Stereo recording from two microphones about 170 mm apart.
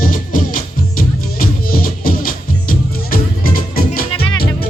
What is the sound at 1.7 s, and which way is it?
Music, 55° left (ahead or behind).